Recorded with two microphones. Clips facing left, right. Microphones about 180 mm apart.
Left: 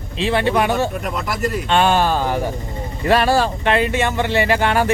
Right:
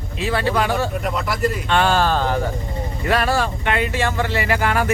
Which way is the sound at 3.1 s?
30° left (ahead or behind).